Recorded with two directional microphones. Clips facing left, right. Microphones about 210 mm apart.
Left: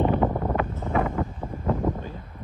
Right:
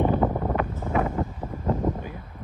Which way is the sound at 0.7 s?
10° right (ahead or behind).